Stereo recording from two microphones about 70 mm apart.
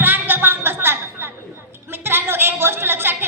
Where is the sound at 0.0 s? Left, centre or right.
Right.